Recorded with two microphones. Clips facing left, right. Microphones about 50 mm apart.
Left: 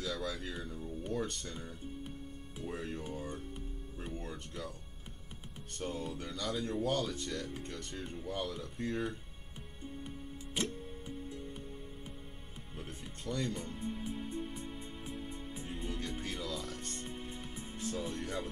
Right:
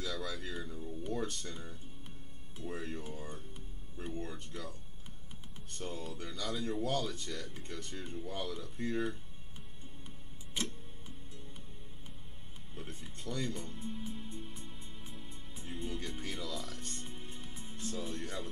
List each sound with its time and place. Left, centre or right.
0.0 s speech: centre
5.8 s speech: centre
10.0 s music: centre
12.7 s speech: centre
14.4 s music: centre